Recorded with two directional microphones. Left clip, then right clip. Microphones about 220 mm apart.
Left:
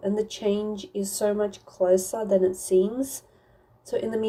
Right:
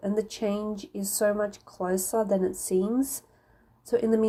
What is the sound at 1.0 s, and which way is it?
Speech, 50° right (ahead or behind).